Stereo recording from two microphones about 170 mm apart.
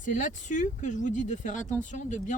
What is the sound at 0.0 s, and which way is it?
Speech, 50° left (ahead or behind).